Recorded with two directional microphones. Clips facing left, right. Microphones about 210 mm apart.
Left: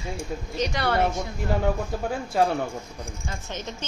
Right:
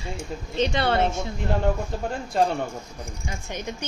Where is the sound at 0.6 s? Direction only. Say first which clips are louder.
Right 2 dB; 25° right (ahead or behind).